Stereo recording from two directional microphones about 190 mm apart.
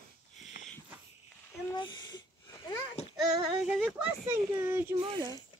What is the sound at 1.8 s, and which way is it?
Wheeze, 25° left (ahead or behind).